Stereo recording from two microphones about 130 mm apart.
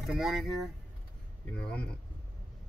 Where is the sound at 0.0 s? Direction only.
Centre (ahead or behind).